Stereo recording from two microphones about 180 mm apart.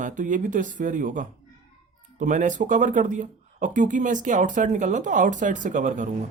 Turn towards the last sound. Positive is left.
turn(degrees=-45)  # may be behind; listen again after turning